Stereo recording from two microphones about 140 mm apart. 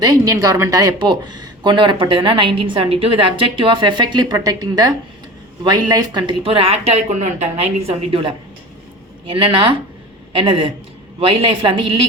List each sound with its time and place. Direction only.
0.0 s speech: 25° right (ahead or behind)